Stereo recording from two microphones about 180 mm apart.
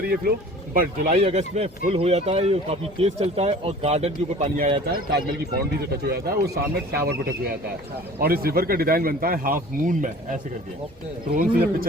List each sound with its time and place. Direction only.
0.7 s a man's voice: 50° right (ahead or behind)
1.1 s speech: 35° right (ahead or behind)
6.0 s speech: 60° right (ahead or behind)
11.3 s a man's voice: 55° right (ahead or behind)